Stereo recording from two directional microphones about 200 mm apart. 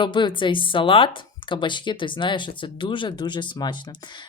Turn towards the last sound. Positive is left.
turn(degrees=25)  # may be behind; listen again after turning